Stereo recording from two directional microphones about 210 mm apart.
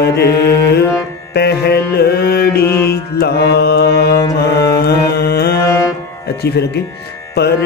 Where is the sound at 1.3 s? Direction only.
50° left (ahead or behind).